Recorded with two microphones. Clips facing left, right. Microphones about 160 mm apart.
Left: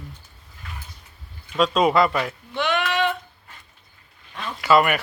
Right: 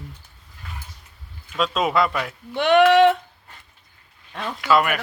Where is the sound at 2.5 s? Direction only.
60° right (ahead or behind).